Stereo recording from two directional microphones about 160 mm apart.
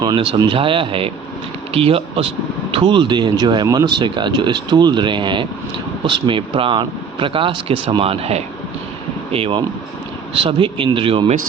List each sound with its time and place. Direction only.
0.0 s speech: 30° right (ahead or behind)